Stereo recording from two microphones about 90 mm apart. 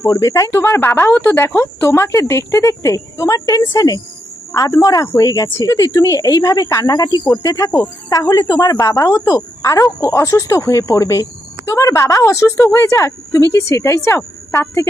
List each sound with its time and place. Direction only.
0.0 s a woman's voice: 40° left (ahead or behind)
0.6 s a woman's voice: 25° left (ahead or behind)